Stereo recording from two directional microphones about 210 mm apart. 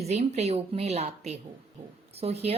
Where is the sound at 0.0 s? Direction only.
30° right (ahead or behind).